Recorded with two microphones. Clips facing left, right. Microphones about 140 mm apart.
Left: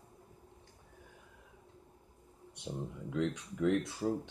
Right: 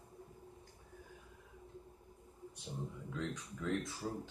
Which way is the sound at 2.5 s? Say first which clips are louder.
Left 5 dB; 70° left (ahead or behind).